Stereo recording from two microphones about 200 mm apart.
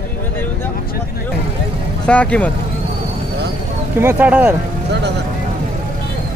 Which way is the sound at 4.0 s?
10° right (ahead or behind).